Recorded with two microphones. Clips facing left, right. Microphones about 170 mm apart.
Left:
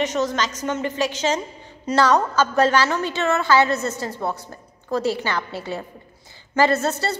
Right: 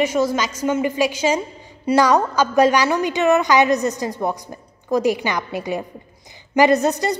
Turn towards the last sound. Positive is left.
turn(degrees=-15)  # may be behind; listen again after turning